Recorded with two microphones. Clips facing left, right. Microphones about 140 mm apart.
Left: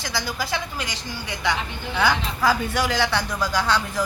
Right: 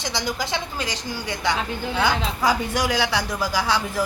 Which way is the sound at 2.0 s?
15° right (ahead or behind).